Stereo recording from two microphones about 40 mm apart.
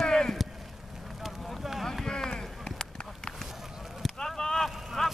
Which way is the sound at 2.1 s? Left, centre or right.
Centre.